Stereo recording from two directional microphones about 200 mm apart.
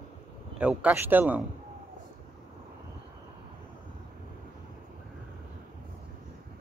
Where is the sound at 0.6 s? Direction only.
5° right (ahead or behind).